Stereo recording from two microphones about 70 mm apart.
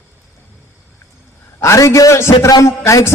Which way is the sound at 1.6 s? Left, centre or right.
Left.